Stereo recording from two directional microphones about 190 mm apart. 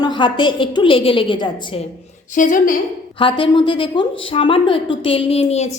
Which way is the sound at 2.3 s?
45° left (ahead or behind).